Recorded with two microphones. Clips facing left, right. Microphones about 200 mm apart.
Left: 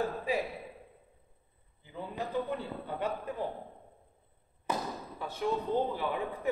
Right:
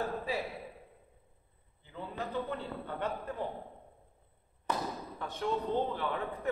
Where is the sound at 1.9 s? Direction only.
10° left (ahead or behind).